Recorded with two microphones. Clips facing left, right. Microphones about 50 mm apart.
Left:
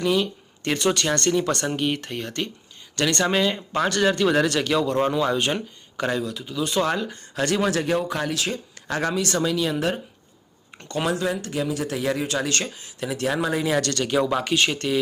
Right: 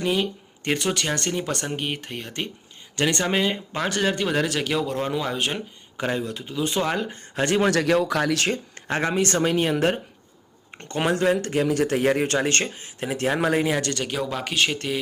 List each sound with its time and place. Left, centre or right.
0.0 s speech: centre
2.9 s speech: centre
6.2 s speech: right
7.7 s speech: right
8.3 s speech: right
8.9 s a man's voice: right
10.8 s speech: right
11.1 s a man's voice: right
12.4 s speech: right
13.4 s speech: right
13.7 s speech: centre